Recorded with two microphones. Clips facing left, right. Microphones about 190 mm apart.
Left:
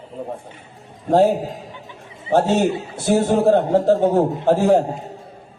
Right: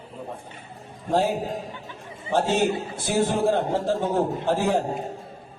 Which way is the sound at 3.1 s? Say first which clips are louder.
Left 7 dB; 45° left (ahead or behind).